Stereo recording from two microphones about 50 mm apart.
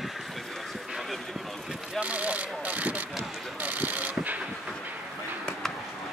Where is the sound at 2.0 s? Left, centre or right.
Right.